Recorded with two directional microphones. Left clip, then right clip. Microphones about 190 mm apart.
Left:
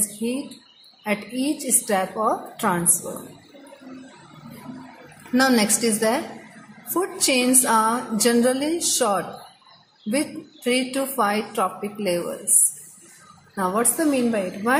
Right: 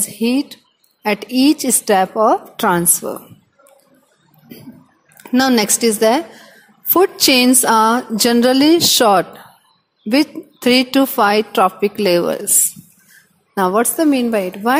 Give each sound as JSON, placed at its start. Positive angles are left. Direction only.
{"t": 1.0, "sound": "speech", "side_deg": -50}
{"t": 5.3, "sound": "speech", "side_deg": -45}
{"t": 13.6, "sound": "speech", "side_deg": -45}